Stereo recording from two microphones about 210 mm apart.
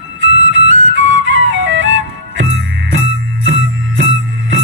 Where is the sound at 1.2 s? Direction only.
65° right (ahead or behind).